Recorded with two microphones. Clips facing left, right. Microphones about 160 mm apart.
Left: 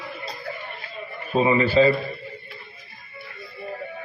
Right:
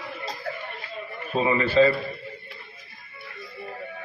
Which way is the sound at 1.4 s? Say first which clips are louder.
Left 4 dB; 20° left (ahead or behind).